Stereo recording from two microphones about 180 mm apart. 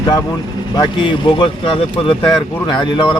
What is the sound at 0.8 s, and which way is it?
Speech, 25° left (ahead or behind).